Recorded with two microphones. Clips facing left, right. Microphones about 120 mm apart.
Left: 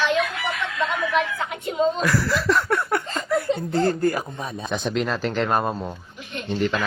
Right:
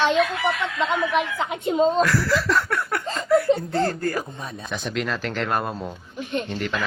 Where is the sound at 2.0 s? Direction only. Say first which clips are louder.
Right 2 dB; 15° left (ahead or behind).